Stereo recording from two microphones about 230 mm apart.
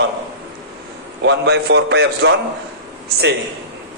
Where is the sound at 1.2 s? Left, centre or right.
Right.